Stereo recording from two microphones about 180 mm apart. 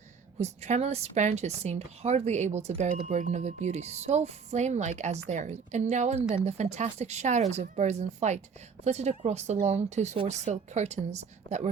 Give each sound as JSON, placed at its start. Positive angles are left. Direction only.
{"t": 0.3, "sound": "speech", "side_deg": -40}